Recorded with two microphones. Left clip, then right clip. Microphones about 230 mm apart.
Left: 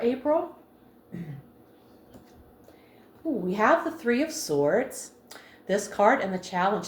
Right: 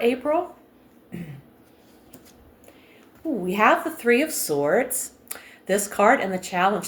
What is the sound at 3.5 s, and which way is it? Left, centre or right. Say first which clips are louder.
Speech: right 4 dB; right.